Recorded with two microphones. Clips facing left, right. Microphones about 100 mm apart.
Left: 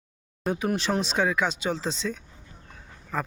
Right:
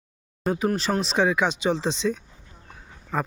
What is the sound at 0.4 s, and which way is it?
Speech, centre (ahead or behind).